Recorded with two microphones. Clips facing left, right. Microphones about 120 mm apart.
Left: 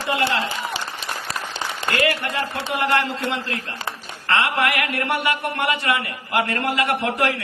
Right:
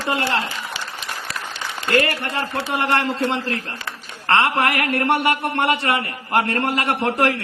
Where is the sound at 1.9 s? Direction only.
40° right (ahead or behind).